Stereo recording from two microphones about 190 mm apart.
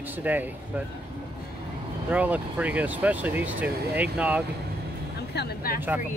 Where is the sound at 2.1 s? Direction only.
10° right (ahead or behind).